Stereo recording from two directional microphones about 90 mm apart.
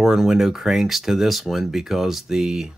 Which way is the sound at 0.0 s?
5° right (ahead or behind).